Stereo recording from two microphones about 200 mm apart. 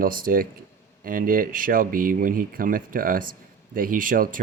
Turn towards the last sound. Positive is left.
turn(degrees=-45)  # may be behind; listen again after turning